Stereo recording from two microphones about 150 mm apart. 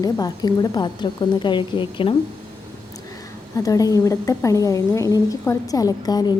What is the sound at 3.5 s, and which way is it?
A woman's voice, 20° left (ahead or behind).